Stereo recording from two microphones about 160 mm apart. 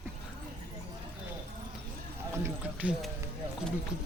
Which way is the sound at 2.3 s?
15° right (ahead or behind).